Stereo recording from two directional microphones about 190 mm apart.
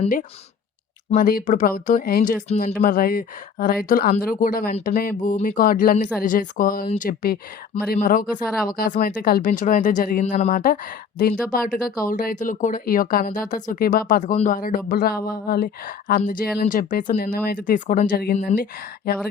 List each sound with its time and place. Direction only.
1.1 s speech: 50° left (ahead or behind)
2.5 s speech: 35° left (ahead or behind)
2.8 s speech: 50° left (ahead or behind)